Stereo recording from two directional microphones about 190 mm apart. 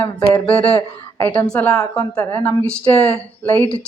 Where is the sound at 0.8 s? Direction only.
20° left (ahead or behind).